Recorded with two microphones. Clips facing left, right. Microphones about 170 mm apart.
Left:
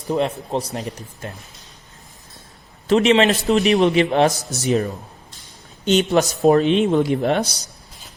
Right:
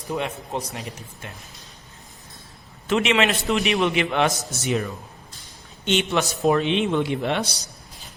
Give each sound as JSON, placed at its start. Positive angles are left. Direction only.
{"t": 0.1, "sound": "a man's voice", "side_deg": 35}
{"t": 2.8, "sound": "a man's voice", "side_deg": 35}